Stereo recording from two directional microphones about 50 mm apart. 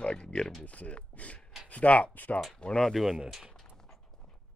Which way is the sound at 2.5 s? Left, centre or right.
Centre.